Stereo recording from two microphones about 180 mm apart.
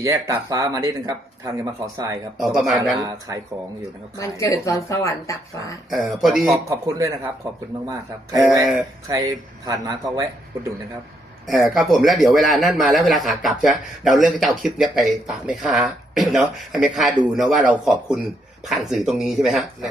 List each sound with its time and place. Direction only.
0.0 s speech: 15° right (ahead or behind)
2.4 s a man's voice: centre (ahead or behind)
3.0 s speech: 20° right (ahead or behind)
4.2 s speech: 15° left (ahead or behind)
5.9 s a man's voice: centre (ahead or behind)
6.7 s speech: 20° right (ahead or behind)
11.4 s a man's voice: centre (ahead or behind)